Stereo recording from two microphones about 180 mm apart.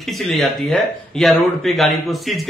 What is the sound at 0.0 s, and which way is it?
Speech, centre (ahead or behind).